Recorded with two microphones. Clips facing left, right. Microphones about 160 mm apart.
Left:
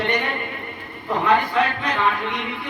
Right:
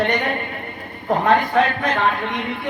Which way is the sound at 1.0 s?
45° right (ahead or behind).